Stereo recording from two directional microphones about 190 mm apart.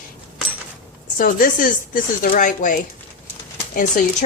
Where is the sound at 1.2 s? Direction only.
45° left (ahead or behind).